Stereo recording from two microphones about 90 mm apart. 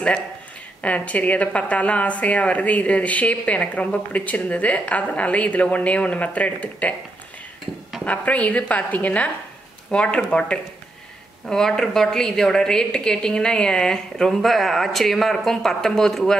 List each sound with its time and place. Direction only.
0.8 s a woman's voice: 15° left (ahead or behind)
8.0 s a woman's voice: 15° left (ahead or behind)